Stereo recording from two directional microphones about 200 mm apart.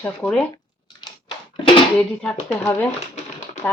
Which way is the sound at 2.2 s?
5° left (ahead or behind).